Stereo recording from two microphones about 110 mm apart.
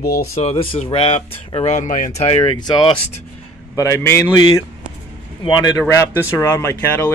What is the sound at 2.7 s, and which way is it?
Speech, 40° left (ahead or behind).